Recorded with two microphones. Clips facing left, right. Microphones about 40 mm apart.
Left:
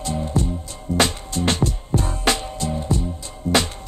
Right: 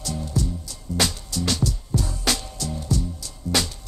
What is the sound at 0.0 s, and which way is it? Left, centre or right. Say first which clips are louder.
Music: left 4 dB; left.